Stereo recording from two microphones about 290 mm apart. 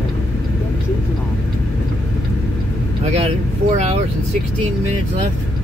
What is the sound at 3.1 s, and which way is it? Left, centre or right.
Vehicle, right.